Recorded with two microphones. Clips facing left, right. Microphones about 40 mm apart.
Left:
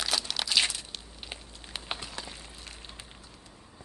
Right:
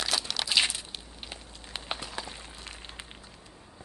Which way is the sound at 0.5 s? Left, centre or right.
Centre.